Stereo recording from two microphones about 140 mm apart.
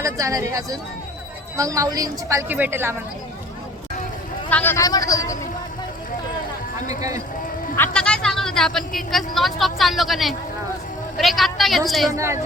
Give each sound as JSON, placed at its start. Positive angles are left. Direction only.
{"t": 0.0, "sound": "a woman's voice", "side_deg": -20}
{"t": 4.4, "sound": "speech", "side_deg": 15}
{"t": 4.8, "sound": "speech", "side_deg": 25}
{"t": 7.8, "sound": "speech", "side_deg": 5}
{"t": 12.1, "sound": "a woman's voice", "side_deg": -20}